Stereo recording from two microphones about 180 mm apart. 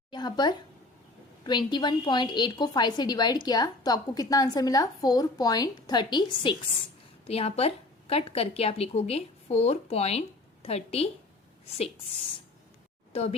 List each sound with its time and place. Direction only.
0.1 s a woman's voice: 25° left (ahead or behind)
7.3 s a woman's voice: 35° left (ahead or behind)